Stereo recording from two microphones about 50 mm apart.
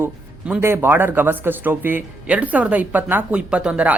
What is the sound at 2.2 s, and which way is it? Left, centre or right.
Speech, right.